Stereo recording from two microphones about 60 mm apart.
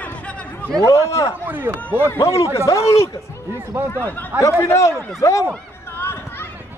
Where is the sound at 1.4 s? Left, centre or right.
Right.